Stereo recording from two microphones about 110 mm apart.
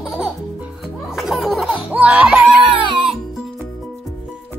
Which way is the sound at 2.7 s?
50° right (ahead or behind).